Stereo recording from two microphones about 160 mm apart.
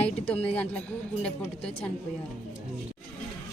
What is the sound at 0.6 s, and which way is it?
Speech, 10° left (ahead or behind).